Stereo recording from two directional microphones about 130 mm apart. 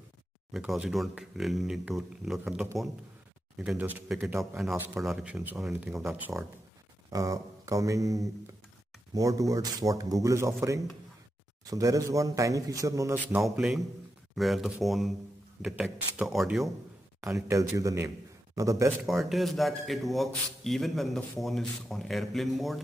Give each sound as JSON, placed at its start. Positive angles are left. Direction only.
{"t": 0.5, "sound": "a man's voice", "side_deg": -5}
{"t": 4.4, "sound": "a man's voice", "side_deg": 0}
{"t": 7.1, "sound": "speech", "side_deg": -25}
{"t": 13.4, "sound": "a man's voice", "side_deg": 0}
{"t": 17.2, "sound": "a man's voice", "side_deg": -25}
{"t": 19.0, "sound": "a man's voice", "side_deg": 0}